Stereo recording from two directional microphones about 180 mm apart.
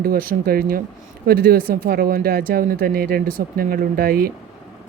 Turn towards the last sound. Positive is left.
turn(degrees=-55)  # may be behind; listen again after turning